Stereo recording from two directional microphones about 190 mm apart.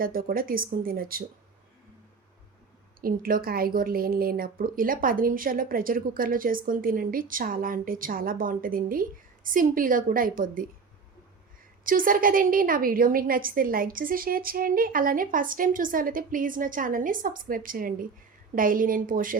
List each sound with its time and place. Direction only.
0.0 s a woman's voice: 50° right (ahead or behind)
3.0 s a woman's voice: 50° right (ahead or behind)
11.9 s a woman's voice: 45° right (ahead or behind)